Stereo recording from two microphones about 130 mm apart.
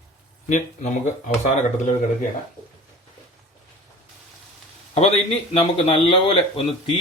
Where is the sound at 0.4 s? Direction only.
70° left (ahead or behind).